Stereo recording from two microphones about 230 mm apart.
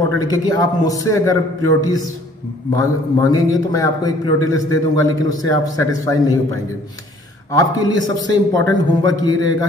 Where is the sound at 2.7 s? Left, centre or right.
Centre.